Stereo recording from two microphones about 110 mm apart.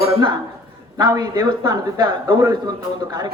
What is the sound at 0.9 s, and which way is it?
A man's voice, 35° right (ahead or behind).